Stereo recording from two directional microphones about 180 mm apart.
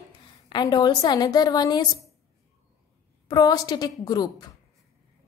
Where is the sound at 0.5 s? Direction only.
25° left (ahead or behind).